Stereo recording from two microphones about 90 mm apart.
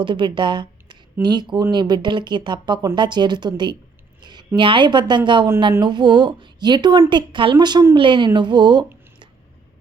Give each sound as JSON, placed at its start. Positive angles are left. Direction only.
{"t": 0.0, "sound": "a woman's voice", "side_deg": -60}
{"t": 7.9, "sound": "speech", "side_deg": -65}